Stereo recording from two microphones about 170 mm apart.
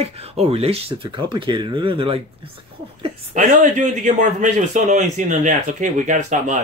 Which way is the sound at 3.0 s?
45° right (ahead or behind).